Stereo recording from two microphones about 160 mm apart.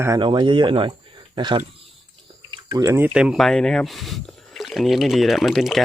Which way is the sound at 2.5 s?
30° right (ahead or behind).